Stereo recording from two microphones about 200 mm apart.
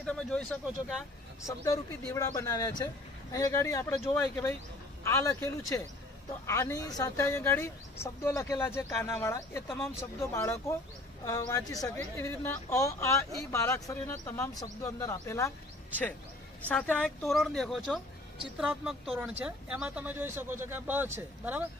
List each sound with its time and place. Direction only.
0.0 s speech: 5° left (ahead or behind)
1.6 s speech: 15° left (ahead or behind)
16.6 s speech: 5° left (ahead or behind); by 21.6 s 10° right (ahead or behind)